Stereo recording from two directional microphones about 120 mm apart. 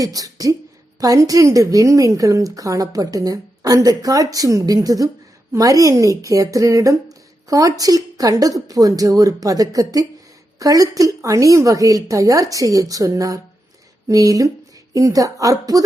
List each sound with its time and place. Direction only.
0.0 s a woman's voice: 30° right (ahead or behind)